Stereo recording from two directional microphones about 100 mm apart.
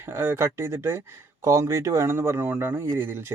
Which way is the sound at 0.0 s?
25° right (ahead or behind).